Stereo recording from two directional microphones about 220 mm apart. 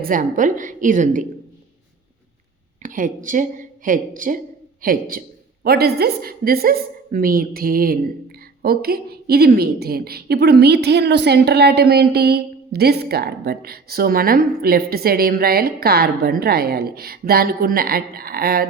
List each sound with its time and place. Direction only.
0.0 s a woman's voice: 40° right (ahead or behind)
2.8 s a woman's voice: 35° right (ahead or behind)